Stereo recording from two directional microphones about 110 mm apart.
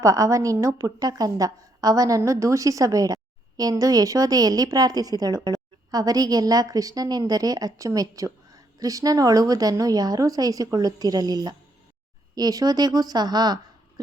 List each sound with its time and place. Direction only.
0.0 s a woman's voice: 30° right (ahead or behind)